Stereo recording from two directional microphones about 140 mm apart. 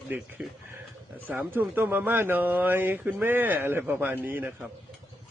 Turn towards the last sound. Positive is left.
turn(degrees=-10)  # may be behind; listen again after turning